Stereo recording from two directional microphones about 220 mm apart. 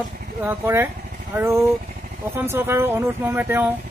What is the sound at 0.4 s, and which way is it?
Speech, 10° right (ahead or behind).